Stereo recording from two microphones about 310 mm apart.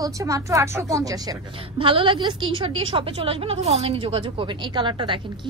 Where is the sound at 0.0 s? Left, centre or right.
Centre.